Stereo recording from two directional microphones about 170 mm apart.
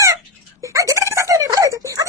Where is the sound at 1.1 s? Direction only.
20° right (ahead or behind).